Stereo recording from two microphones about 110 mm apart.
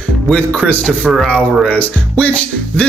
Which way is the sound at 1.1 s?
Centre (ahead or behind).